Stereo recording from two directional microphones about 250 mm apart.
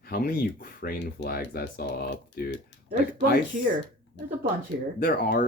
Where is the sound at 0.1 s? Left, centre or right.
Left.